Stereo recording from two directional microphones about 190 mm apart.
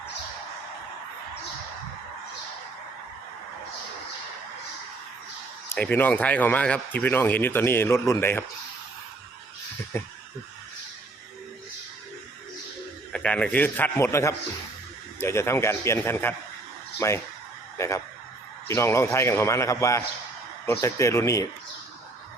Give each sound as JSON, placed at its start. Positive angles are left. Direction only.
{"t": 5.6, "sound": "speech", "side_deg": 10}
{"t": 9.9, "sound": "speech", "side_deg": 15}
{"t": 13.1, "sound": "speech", "side_deg": 5}